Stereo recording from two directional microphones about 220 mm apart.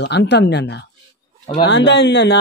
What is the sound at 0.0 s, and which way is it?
A man's voice, 50° left (ahead or behind).